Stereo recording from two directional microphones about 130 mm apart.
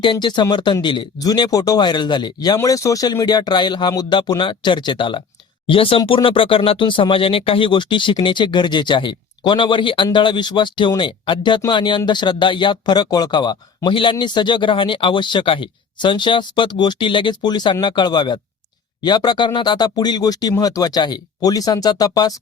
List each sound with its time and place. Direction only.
0.0 s speech: 35° left (ahead or behind)